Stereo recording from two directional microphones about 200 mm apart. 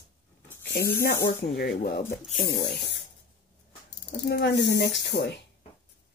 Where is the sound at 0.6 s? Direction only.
50° left (ahead or behind).